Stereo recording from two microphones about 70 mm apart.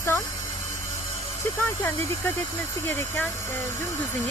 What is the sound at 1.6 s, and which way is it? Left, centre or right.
Speech, left.